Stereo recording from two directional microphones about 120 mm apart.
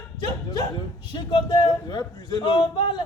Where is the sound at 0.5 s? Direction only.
40° left (ahead or behind).